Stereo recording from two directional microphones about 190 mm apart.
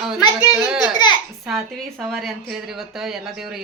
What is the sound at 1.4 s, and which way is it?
A woman's voice, centre (ahead or behind).